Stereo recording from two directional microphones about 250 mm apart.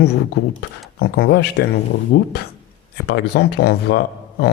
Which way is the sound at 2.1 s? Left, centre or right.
Left.